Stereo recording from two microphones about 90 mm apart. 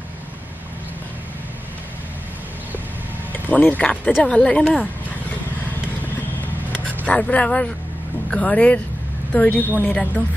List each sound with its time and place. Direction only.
3.4 s speech: 20° left (ahead or behind)
7.1 s speech: 15° left (ahead or behind)
9.6 s a woman's voice: 20° right (ahead or behind)